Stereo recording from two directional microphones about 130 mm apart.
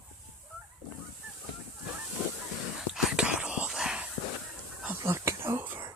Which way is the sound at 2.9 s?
5° right (ahead or behind).